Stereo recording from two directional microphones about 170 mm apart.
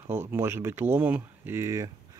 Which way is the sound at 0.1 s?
15° right (ahead or behind).